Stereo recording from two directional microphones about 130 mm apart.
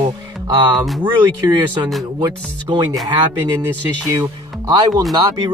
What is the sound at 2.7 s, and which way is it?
Speech, 35° right (ahead or behind).